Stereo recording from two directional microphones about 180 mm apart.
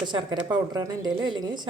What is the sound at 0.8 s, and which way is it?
Speech, 20° right (ahead or behind).